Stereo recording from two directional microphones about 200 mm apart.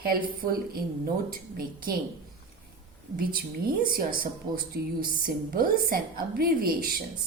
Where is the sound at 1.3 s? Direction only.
45° right (ahead or behind).